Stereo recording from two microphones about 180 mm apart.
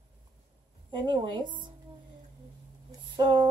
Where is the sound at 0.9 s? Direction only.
25° right (ahead or behind).